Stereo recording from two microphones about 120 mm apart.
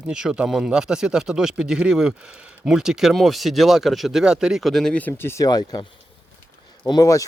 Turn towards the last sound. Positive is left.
turn(degrees=30)  # may be behind; listen again after turning